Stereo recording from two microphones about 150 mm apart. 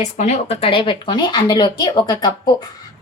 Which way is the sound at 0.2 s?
45° left (ahead or behind).